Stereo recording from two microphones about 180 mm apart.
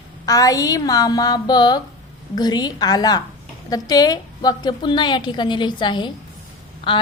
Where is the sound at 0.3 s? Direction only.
20° left (ahead or behind).